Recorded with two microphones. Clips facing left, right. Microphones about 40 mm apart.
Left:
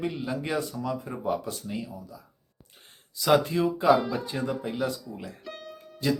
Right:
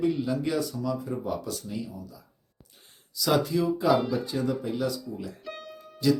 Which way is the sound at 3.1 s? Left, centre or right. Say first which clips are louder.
Left 2 dB; left.